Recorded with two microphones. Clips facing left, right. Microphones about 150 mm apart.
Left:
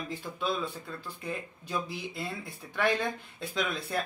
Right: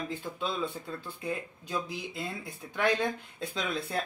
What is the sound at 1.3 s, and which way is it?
Speech, 20° right (ahead or behind).